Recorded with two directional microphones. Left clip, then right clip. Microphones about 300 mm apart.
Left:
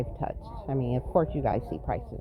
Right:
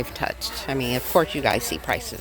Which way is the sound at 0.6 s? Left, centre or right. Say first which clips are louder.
Right 5 dB; right.